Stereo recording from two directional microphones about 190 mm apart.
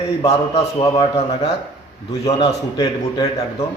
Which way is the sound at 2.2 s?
25° left (ahead or behind).